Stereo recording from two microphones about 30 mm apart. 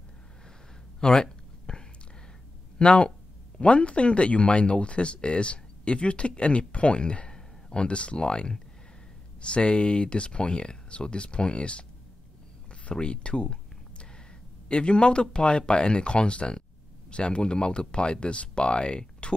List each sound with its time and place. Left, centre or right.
1.0 s a sound: left
2.8 s speech: left
12.9 s speech: left